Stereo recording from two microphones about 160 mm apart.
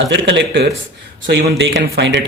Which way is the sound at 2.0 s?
90° right.